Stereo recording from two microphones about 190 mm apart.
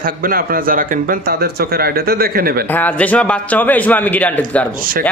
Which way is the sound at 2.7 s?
10° left (ahead or behind).